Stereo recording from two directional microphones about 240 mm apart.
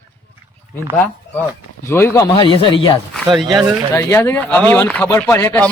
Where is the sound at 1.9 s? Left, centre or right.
Centre.